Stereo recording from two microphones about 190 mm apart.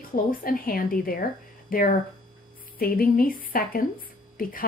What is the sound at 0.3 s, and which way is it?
Speech, 50° left (ahead or behind).